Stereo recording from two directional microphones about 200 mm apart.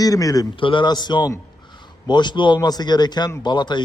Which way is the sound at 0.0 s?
15° left (ahead or behind).